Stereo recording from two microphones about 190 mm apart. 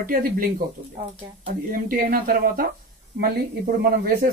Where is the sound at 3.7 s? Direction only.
50° right (ahead or behind).